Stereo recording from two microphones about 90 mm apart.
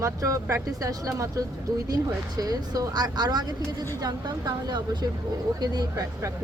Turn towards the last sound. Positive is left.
turn(degrees=-45)  # may be behind; listen again after turning